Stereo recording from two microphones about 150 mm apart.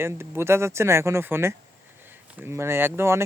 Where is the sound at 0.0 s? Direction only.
15° right (ahead or behind).